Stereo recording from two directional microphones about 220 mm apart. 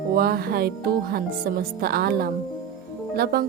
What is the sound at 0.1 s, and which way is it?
A woman's voice, 45° right (ahead or behind).